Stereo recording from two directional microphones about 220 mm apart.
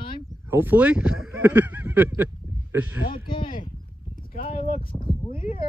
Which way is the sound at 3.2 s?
20° left (ahead or behind).